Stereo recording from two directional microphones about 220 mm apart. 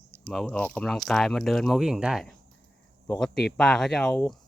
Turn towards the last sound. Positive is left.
turn(degrees=5)  # may be behind; listen again after turning